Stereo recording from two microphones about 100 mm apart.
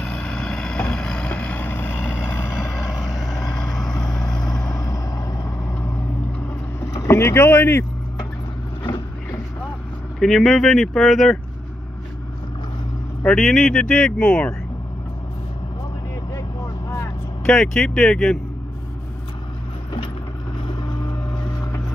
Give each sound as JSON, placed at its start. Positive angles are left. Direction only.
{"t": 0.0, "sound": "vehicle", "side_deg": 5}
{"t": 2.9, "sound": "vehicle", "side_deg": -5}
{"t": 4.7, "sound": "vehicle", "side_deg": 40}
{"t": 6.9, "sound": "speech", "side_deg": 30}
{"t": 10.1, "sound": "speech", "side_deg": 5}
{"t": 13.2, "sound": "speech", "side_deg": 5}
{"t": 16.3, "sound": "vehicle", "side_deg": 30}
{"t": 17.5, "sound": "speech", "side_deg": 5}